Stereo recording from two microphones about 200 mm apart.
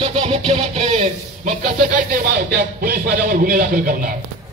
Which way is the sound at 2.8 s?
45° right (ahead or behind).